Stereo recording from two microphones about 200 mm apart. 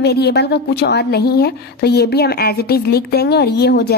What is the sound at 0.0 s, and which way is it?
A woman's voice, 55° left (ahead or behind).